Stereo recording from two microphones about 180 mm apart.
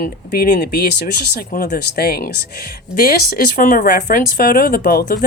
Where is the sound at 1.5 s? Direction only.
45° left (ahead or behind).